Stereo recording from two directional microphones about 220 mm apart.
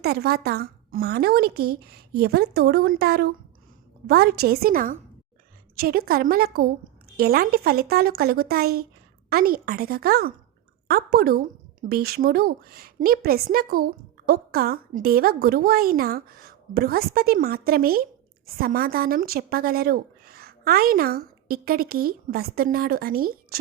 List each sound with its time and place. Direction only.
0.0 s a woman's voice: 45° right (ahead or behind)